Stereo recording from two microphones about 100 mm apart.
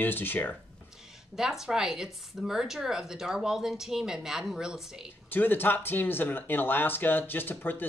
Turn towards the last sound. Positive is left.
turn(degrees=20)  # may be behind; listen again after turning